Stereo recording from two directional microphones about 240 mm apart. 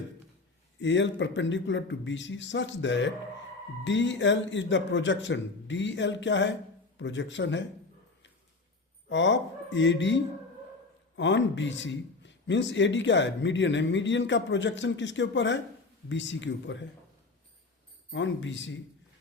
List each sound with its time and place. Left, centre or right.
0.8 s a man's voice: left
9.0 s a man's voice: left
11.2 s a man's voice: left
18.1 s a man's voice: left